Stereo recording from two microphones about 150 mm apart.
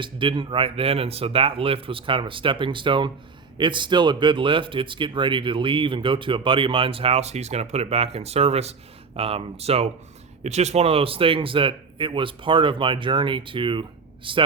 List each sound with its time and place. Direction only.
0.0 s speech: 35° right (ahead or behind)